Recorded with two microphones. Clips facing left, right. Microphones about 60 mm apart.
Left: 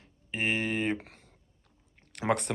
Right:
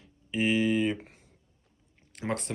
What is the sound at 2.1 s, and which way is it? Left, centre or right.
Speech, left.